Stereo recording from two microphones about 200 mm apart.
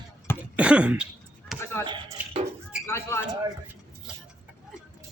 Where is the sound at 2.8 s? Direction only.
15° left (ahead or behind).